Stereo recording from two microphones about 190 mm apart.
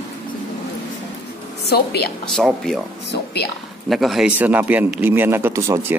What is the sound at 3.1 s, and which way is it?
Speech, 60° left (ahead or behind).